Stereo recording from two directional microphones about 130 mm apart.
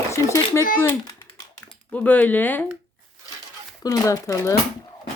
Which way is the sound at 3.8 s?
30° left (ahead or behind).